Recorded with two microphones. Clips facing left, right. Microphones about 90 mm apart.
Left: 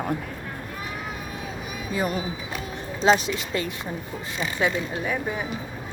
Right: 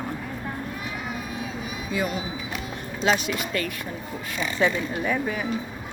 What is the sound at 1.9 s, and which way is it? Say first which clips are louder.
Speech: left 1 dB; 35° left (ahead or behind).